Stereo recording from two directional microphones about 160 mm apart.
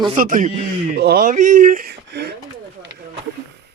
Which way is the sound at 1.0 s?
75° right (ahead or behind).